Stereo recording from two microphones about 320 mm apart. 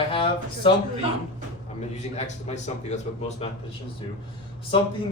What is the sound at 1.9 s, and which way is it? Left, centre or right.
A man's voice, left.